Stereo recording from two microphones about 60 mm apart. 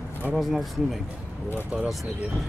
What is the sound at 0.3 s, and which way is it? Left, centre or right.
Speech, centre.